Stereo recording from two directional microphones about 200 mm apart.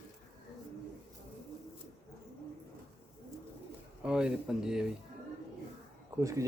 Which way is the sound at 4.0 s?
5° right (ahead or behind).